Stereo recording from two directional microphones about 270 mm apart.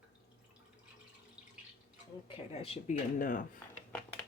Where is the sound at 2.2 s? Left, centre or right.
Centre.